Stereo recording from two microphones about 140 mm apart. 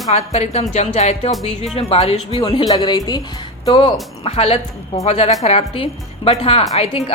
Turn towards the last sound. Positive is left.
turn(degrees=45)  # may be behind; listen again after turning